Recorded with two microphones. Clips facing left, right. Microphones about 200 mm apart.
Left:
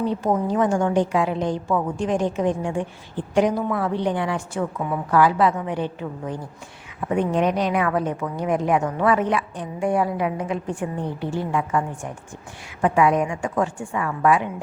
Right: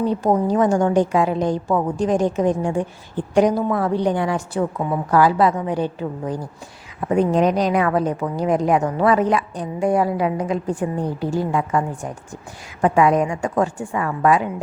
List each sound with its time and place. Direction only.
0.0 s a woman's voice: 40° right (ahead or behind)